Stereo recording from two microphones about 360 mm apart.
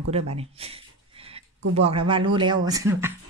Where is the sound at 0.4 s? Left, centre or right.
Centre.